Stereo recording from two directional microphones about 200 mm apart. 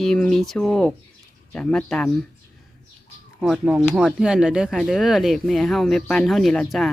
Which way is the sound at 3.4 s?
5° right (ahead or behind).